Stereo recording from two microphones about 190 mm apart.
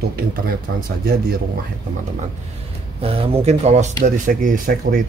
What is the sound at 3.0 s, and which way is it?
Speech, 30° right (ahead or behind).